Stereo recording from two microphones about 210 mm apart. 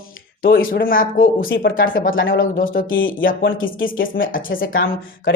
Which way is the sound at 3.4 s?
65° left (ahead or behind).